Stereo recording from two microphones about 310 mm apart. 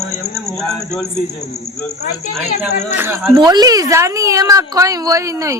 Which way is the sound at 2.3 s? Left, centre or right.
Centre.